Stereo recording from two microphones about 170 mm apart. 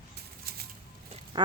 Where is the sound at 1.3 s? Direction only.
30° right (ahead or behind).